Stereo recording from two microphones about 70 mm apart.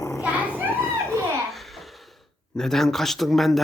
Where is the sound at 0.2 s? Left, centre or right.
Right.